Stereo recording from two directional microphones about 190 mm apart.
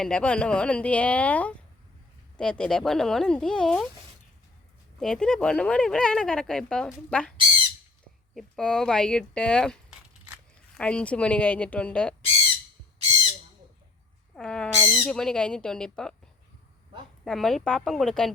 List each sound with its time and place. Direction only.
0.0 s speech: 5° left (ahead or behind)
4.9 s speech: 5° left (ahead or behind)
8.4 s speech: 5° left (ahead or behind)
14.3 s speech: 5° left (ahead or behind)
17.2 s speech: centre (ahead or behind)